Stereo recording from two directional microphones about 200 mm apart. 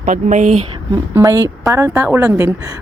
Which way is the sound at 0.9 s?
15° right (ahead or behind).